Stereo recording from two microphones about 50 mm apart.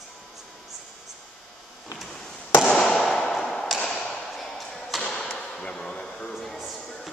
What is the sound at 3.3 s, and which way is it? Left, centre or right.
Ping, centre.